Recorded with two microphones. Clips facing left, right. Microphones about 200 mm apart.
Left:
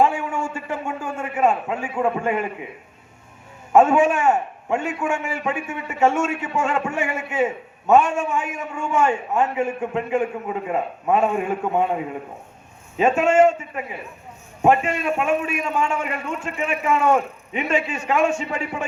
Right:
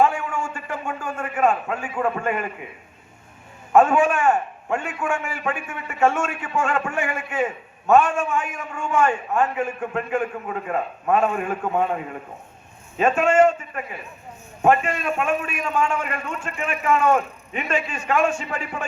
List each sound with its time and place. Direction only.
0.0 s a sound: 25° left (ahead or behind)
1.4 s a man's voice: 25° left (ahead or behind)
2.0 s a man's voice: 15° left (ahead or behind)
3.7 s a man's voice: 25° left (ahead or behind)